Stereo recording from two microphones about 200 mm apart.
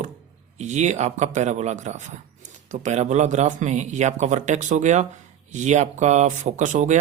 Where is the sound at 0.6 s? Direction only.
35° right (ahead or behind).